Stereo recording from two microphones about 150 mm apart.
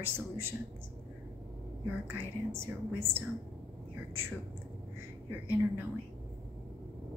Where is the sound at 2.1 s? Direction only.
15° right (ahead or behind).